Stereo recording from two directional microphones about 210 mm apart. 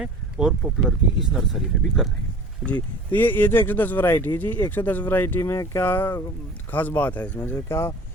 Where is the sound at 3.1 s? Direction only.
10° left (ahead or behind).